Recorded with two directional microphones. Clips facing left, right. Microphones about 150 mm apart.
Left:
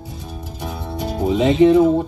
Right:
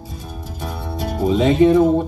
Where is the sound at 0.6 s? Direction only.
10° left (ahead or behind).